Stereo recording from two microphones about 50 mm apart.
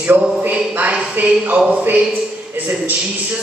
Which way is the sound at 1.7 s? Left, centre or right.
Right.